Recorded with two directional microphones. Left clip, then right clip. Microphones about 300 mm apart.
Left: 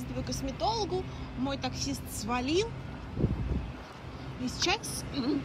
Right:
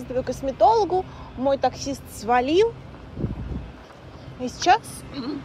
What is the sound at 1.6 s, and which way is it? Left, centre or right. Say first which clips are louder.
A woman's voice: right 11 dB; centre.